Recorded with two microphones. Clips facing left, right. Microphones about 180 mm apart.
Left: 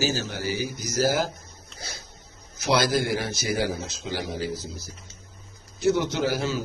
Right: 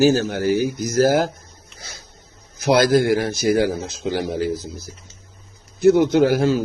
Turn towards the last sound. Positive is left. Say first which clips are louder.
# right 10 dB
turn(degrees=-50)  # may be behind; listen again after turning